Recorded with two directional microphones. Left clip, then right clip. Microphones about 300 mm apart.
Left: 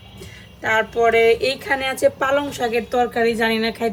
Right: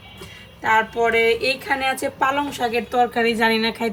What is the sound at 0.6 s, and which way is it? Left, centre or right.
Speech, centre.